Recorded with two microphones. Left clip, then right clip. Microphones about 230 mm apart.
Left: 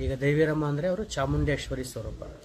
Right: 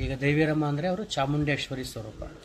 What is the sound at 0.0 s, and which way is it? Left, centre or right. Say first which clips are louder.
Speech: left 1 dB; centre.